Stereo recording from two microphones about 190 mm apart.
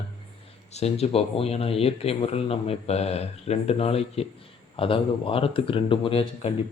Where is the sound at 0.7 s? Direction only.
35° left (ahead or behind).